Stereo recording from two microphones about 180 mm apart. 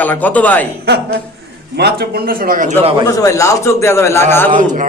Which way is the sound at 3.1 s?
15° left (ahead or behind).